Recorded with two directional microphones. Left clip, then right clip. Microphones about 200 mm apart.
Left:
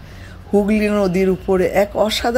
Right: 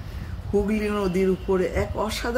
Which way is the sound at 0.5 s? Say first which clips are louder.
Left 8 dB; 40° left (ahead or behind).